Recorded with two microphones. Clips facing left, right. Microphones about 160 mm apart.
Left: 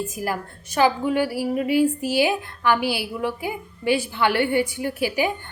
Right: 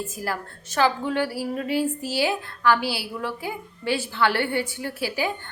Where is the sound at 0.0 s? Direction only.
15° left (ahead or behind).